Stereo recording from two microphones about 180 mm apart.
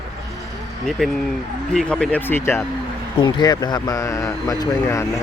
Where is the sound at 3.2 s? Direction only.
25° left (ahead or behind).